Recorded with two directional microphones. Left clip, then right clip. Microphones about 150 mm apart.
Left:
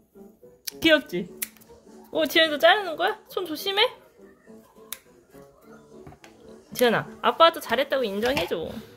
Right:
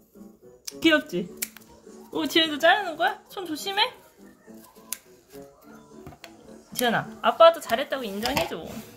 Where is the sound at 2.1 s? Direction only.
40° left (ahead or behind).